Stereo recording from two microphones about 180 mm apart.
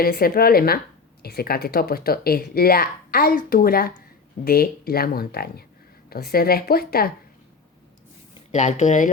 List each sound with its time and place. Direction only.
0.0 s speech: 55° left (ahead or behind)
8.5 s speech: 40° left (ahead or behind)